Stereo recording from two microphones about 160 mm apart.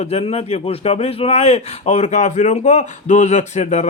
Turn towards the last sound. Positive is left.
turn(degrees=45)  # may be behind; listen again after turning